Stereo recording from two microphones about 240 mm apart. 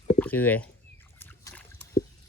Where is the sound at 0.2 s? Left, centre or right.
Centre.